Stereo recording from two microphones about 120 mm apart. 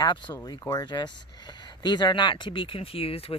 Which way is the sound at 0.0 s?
40° left (ahead or behind).